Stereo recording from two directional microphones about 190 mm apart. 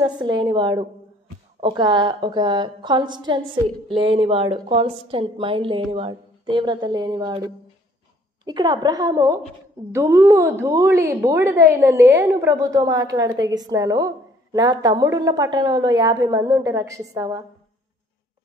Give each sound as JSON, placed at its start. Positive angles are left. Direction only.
{"t": 0.0, "sound": "a woman's voice", "side_deg": -25}